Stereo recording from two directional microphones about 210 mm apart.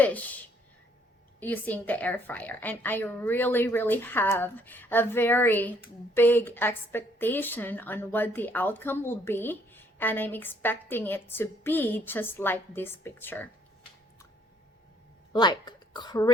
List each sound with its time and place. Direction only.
0.0 s a woman's voice: 5° left (ahead or behind)
1.4 s a woman's voice: 10° left (ahead or behind)
15.3 s speech: 20° left (ahead or behind)